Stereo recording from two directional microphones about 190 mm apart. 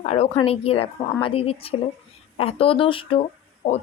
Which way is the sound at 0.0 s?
35° left (ahead or behind).